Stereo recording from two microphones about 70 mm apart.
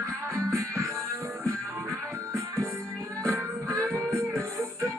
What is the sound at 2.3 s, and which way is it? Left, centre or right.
Music, right.